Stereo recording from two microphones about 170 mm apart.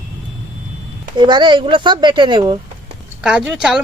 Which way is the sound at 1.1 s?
25° right (ahead or behind).